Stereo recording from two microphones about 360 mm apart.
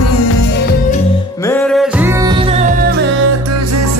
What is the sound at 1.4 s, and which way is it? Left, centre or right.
Music, centre.